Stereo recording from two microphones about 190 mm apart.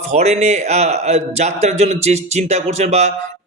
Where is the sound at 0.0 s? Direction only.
35° right (ahead or behind).